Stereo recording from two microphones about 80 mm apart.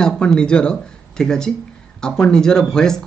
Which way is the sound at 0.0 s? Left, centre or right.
Centre.